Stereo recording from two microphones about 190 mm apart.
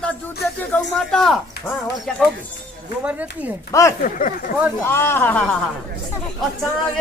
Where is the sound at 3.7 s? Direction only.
15° left (ahead or behind).